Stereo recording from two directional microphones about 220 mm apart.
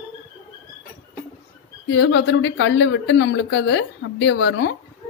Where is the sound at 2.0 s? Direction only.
55° left (ahead or behind).